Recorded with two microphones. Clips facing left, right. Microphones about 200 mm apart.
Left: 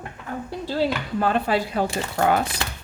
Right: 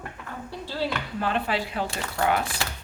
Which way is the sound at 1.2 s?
45° left (ahead or behind).